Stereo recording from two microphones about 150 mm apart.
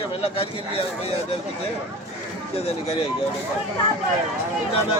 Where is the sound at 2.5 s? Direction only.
45° left (ahead or behind).